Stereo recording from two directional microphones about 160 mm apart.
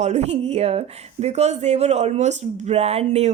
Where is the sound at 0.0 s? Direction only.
45° right (ahead or behind).